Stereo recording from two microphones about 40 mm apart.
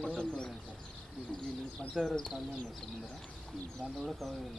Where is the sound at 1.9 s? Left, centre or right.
Centre.